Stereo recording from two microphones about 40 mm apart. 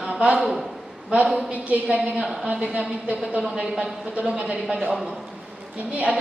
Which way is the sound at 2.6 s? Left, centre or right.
Right.